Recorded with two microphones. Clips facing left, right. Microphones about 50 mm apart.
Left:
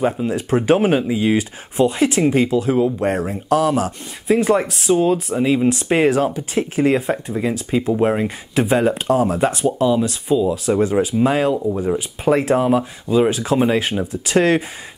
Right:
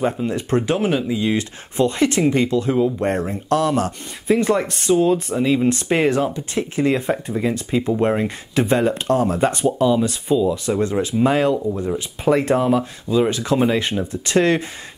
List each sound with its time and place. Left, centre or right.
0.0 s speech: centre
0.7 s speech: left
1.0 s speech: centre
1.8 s speech: centre
11.5 s speech: centre